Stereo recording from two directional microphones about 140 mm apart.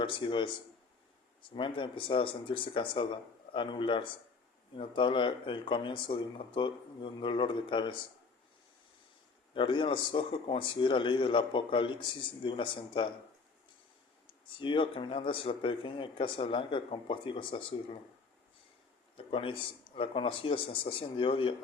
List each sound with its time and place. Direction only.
0.0 s a man's voice: 35° left (ahead or behind)
9.6 s a man's voice: 35° left (ahead or behind)
14.3 s a man's voice: 35° left (ahead or behind)
19.1 s a man's voice: 40° left (ahead or behind)